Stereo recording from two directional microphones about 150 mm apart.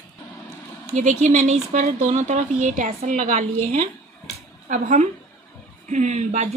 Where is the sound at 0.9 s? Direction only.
55° right (ahead or behind).